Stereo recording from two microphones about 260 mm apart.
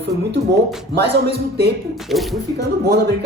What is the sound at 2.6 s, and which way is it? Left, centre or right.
Speech, right.